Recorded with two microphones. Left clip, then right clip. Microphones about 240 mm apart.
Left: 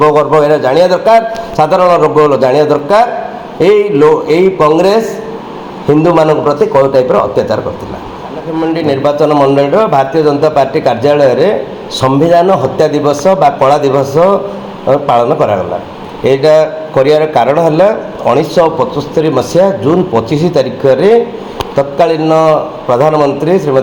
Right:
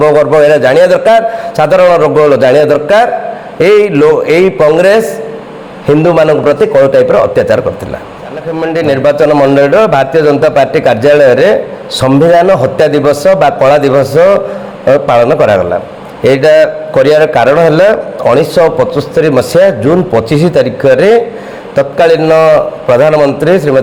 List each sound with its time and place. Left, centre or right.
0.0 s a man's voice: right
3.6 s a man's voice: right
8.7 s a man's voice: right